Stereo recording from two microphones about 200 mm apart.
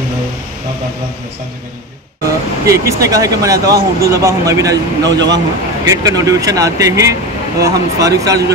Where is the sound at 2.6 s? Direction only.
15° right (ahead or behind).